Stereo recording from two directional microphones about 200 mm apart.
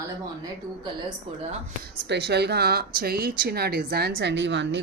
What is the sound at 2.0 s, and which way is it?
Speech, 55° right (ahead or behind).